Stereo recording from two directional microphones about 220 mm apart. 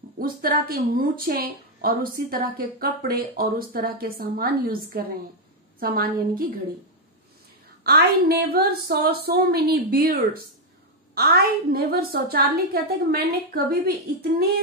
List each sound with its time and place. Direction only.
0.2 s a woman's voice: 40° right (ahead or behind)
7.8 s a woman's voice: 45° right (ahead or behind)